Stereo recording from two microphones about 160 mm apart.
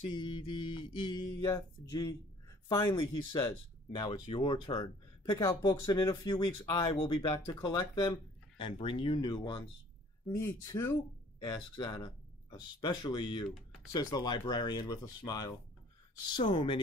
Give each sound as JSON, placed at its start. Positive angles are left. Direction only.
{"t": 0.1, "sound": "speech", "side_deg": 30}